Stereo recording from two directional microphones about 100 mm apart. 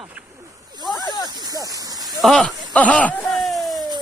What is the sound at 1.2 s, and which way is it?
Speech, 45° right (ahead or behind).